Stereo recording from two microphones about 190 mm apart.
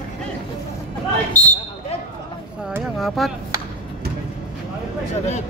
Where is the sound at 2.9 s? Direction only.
Centre (ahead or behind).